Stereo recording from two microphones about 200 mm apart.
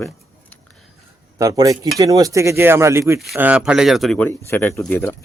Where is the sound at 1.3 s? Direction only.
15° right (ahead or behind); by 5.2 s 10° left (ahead or behind).